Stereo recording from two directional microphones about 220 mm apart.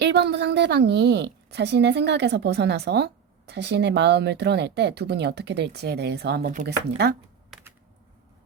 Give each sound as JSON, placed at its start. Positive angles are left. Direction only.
{"t": 0.0, "sound": "a woman's voice", "side_deg": -50}
{"t": 7.5, "sound": "computer keyboard", "side_deg": 0}